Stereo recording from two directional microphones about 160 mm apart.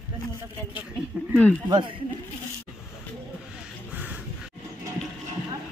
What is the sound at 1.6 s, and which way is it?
Speech, 25° right (ahead or behind).